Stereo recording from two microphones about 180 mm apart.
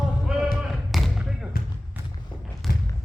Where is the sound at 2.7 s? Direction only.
55° left (ahead or behind).